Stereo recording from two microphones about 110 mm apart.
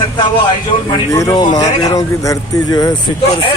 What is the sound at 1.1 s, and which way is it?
Speech, 30° left (ahead or behind).